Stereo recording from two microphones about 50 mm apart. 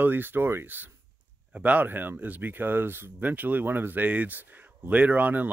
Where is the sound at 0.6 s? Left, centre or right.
Right.